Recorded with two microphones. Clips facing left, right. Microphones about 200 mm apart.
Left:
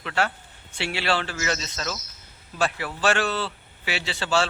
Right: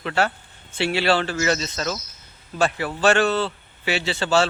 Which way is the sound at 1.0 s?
35° right (ahead or behind).